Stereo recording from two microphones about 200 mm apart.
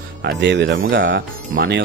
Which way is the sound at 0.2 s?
60° right (ahead or behind).